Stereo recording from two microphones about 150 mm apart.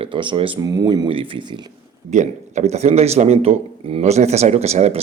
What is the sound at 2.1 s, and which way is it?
A man's voice, 50° right (ahead or behind).